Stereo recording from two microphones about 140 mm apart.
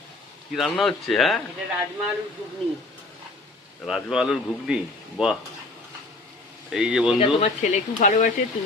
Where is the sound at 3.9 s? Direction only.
Centre (ahead or behind).